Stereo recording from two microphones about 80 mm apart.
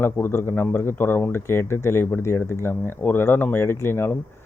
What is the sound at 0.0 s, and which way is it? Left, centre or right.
Speech, left.